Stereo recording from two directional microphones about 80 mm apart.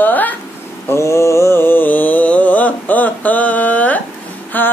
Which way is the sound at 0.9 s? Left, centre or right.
Left.